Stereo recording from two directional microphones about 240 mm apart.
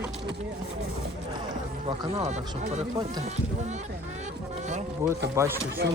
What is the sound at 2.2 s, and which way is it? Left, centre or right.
Speech, right.